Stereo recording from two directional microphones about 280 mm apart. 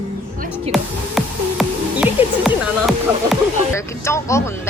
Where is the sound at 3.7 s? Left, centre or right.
Centre.